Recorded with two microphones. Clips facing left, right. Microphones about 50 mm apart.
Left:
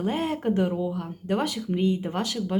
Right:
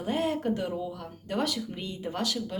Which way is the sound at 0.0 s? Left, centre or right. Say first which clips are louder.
Left 2 dB; left.